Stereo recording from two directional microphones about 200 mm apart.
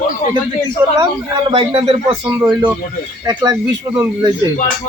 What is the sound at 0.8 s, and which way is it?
Speech, 15° right (ahead or behind).